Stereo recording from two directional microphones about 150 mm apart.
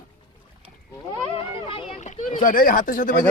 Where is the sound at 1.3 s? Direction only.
40° left (ahead or behind); by 3.1 s 65° left (ahead or behind).